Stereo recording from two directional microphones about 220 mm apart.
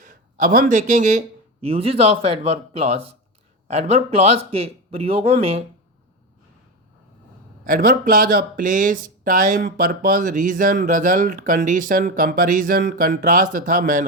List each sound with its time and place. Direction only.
0.0 s speech: 35° right (ahead or behind)
4.4 s speech: 25° right (ahead or behind)
7.6 s speech: 40° right (ahead or behind)